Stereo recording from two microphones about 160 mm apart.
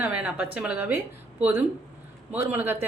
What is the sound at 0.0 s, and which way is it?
A woman's voice, 10° right (ahead or behind).